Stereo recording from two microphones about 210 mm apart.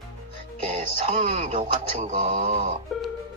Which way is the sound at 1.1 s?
30° right (ahead or behind).